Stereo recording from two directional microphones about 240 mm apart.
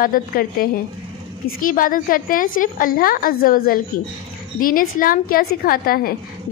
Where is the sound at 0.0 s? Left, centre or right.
Left.